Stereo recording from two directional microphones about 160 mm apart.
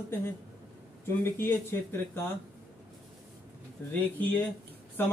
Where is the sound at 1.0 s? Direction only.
15° left (ahead or behind).